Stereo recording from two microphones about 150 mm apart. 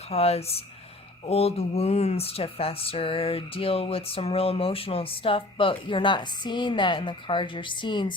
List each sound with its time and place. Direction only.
0.1 s speech: 45° left (ahead or behind)